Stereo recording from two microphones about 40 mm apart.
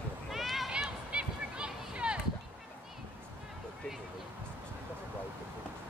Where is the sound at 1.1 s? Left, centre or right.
Right.